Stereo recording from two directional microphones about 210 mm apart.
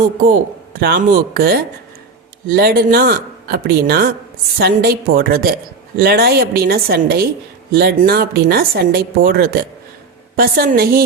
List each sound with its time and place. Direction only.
0.8 s speech: 50° right (ahead or behind)